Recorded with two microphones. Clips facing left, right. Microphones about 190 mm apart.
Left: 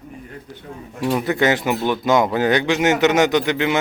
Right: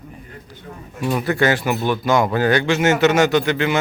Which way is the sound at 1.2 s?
20° left (ahead or behind).